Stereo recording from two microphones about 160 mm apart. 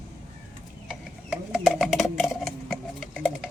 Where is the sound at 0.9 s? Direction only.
5° right (ahead or behind).